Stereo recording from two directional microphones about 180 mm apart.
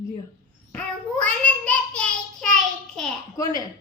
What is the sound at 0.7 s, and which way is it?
Child singing, 5° left (ahead or behind).